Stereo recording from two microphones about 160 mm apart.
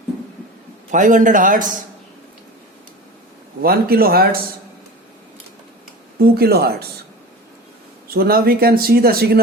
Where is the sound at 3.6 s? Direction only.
70° right (ahead or behind).